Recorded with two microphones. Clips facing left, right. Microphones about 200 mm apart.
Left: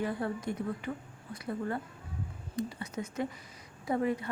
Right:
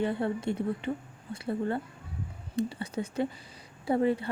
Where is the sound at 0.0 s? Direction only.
25° right (ahead or behind).